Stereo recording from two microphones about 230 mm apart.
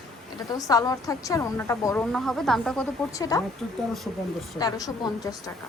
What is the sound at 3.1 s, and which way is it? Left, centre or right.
Speech, centre.